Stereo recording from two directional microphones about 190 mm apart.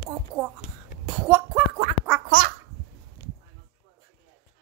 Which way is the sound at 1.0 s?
5° right (ahead or behind).